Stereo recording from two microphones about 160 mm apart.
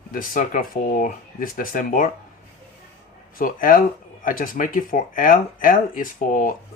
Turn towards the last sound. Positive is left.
turn(degrees=55)  # may be behind; listen again after turning